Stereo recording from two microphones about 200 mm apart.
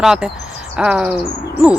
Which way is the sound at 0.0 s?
5° right (ahead or behind).